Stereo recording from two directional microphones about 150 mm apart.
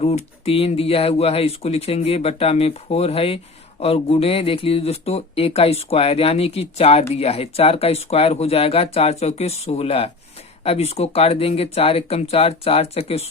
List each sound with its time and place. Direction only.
0.0 s speech: 45° left (ahead or behind)